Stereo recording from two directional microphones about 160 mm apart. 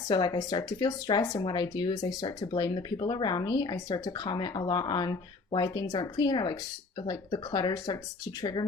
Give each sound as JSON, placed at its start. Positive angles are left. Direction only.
{"t": 0.1, "sound": "speech", "side_deg": 25}